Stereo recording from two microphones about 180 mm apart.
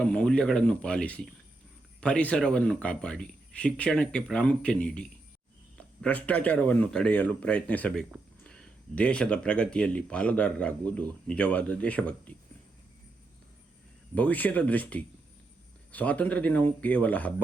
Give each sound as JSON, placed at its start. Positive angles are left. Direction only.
{"t": 0.0, "sound": "speech", "side_deg": 5}
{"t": 14.2, "sound": "speech", "side_deg": 10}